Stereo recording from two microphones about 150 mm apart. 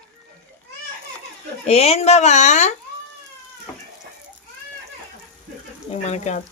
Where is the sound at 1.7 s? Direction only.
45° left (ahead or behind).